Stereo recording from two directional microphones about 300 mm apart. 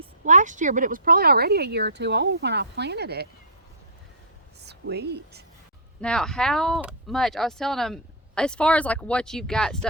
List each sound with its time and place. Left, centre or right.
0.0 s speech: right
4.6 s speech: right
6.0 s speech: centre